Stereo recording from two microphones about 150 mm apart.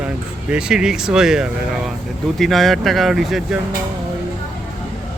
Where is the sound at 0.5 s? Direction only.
5° right (ahead or behind).